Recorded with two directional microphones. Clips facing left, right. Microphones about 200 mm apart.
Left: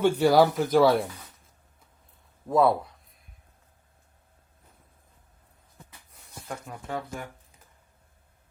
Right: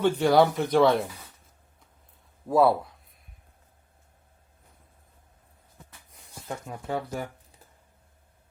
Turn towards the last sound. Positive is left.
turn(degrees=-20)  # may be behind; listen again after turning